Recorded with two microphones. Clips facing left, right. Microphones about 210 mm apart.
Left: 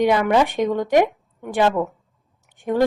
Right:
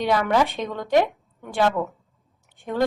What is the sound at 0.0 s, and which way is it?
A woman's voice, 20° left (ahead or behind).